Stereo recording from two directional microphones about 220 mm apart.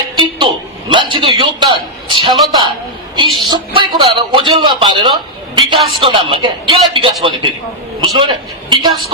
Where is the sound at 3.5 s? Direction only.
20° right (ahead or behind).